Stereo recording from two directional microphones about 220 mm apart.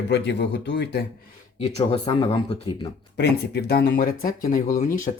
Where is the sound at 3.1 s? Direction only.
50° left (ahead or behind).